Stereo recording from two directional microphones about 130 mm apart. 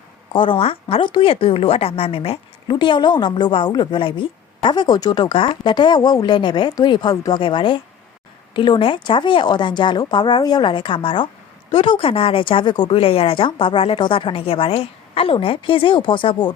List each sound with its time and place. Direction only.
0.3 s a woman's voice: 40° left (ahead or behind)